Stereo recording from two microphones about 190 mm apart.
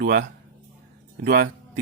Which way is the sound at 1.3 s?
55° right (ahead or behind).